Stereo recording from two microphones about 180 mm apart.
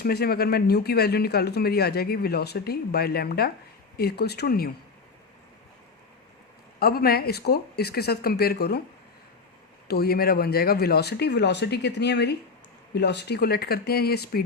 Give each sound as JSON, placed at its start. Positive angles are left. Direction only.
{"t": 0.0, "sound": "speech", "side_deg": 60}
{"t": 6.7, "sound": "speech", "side_deg": 55}
{"t": 9.9, "sound": "speech", "side_deg": 60}